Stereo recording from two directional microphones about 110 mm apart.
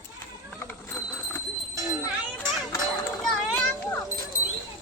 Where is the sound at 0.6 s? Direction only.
20° left (ahead or behind).